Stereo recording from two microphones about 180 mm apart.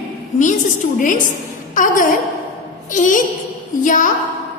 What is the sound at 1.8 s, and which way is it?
Speech, 45° left (ahead or behind).